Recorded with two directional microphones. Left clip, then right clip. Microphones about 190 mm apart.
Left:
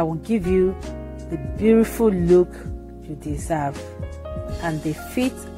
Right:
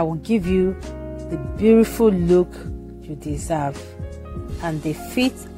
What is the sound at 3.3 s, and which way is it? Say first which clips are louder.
Speech: right 1 dB; 20° right (ahead or behind).